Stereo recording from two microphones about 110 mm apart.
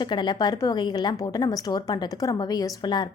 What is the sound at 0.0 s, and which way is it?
A woman's voice, 45° left (ahead or behind).